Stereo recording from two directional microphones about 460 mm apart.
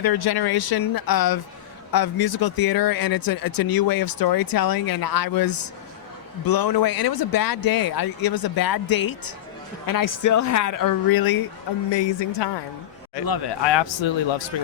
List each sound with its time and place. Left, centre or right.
0.0 s speech: left
11.9 s speech: left